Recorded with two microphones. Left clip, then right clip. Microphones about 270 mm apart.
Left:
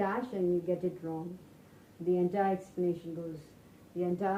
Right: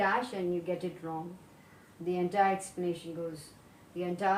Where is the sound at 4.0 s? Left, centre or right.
Right.